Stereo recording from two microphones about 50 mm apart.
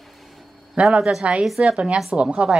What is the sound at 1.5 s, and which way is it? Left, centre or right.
A woman's voice, centre.